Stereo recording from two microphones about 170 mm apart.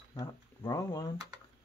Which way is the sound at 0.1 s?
20° left (ahead or behind).